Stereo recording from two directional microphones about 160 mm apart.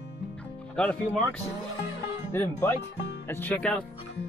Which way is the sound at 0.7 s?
5° left (ahead or behind).